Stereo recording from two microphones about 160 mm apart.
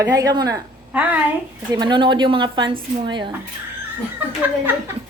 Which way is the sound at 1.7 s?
30° right (ahead or behind).